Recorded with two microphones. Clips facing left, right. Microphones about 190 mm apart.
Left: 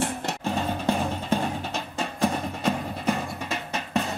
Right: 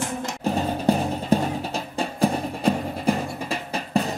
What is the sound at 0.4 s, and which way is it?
Music, 35° right (ahead or behind).